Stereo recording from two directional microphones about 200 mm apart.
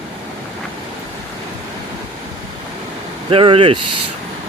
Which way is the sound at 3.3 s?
25° right (ahead or behind).